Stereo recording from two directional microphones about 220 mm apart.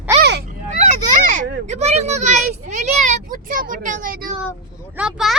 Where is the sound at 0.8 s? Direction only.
35° right (ahead or behind).